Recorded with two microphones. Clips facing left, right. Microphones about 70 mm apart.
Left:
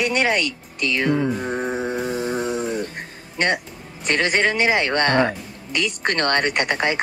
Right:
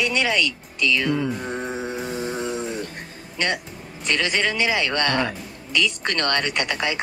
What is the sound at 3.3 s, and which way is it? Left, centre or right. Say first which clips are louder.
Speech: left 4 dB; left.